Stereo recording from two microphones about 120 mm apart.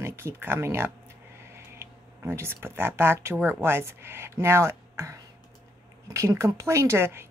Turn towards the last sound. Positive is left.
turn(degrees=-20)  # may be behind; listen again after turning